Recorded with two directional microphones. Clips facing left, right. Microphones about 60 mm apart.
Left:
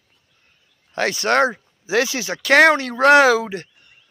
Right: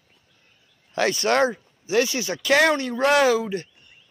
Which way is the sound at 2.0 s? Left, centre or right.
Left.